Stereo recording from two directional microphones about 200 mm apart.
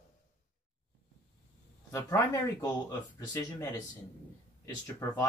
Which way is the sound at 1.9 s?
15° left (ahead or behind).